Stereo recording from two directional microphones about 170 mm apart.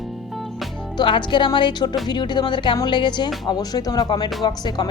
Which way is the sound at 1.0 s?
30° left (ahead or behind).